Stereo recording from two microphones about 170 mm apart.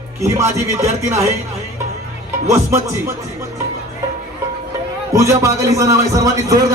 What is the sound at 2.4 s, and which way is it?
Speech, 15° right (ahead or behind).